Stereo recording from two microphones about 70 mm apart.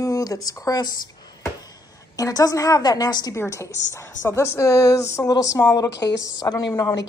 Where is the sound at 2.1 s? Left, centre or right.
Left.